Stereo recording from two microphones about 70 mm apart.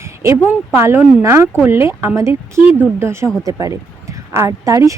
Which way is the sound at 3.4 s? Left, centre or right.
Right.